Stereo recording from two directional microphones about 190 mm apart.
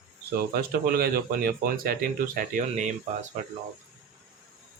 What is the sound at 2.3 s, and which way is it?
Speech, 40° right (ahead or behind).